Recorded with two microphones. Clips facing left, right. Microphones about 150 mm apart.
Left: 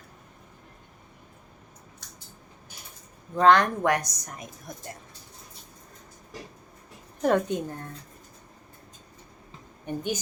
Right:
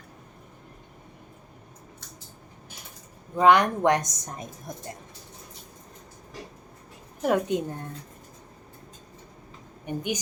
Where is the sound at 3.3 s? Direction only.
15° right (ahead or behind).